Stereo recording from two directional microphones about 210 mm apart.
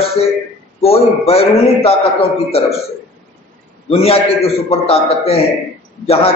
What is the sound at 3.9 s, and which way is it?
A man's voice, 30° left (ahead or behind).